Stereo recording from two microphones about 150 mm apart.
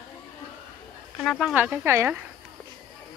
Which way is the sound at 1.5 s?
10° right (ahead or behind).